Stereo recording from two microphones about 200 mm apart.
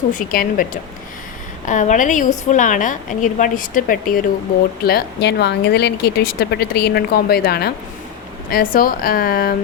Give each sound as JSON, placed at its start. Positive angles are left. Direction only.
{"t": 0.1, "sound": "a woman's voice", "side_deg": 45}